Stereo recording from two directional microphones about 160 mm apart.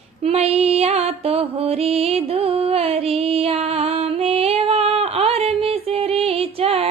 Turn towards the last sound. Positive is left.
turn(degrees=-40)  # may be behind; listen again after turning